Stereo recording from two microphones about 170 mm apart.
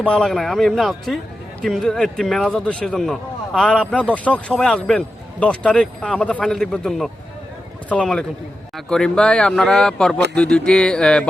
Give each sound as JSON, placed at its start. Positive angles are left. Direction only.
{"t": 0.0, "sound": "a man's voice", "side_deg": 5}